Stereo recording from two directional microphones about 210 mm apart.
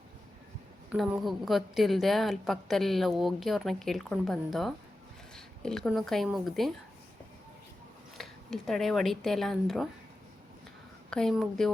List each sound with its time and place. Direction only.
0.9 s a woman's voice: centre (ahead or behind)
8.2 s a woman's voice: centre (ahead or behind)
11.1 s a woman's voice: centre (ahead or behind)